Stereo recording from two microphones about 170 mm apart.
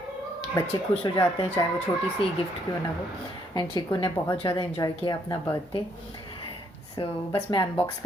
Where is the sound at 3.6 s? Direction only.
25° left (ahead or behind).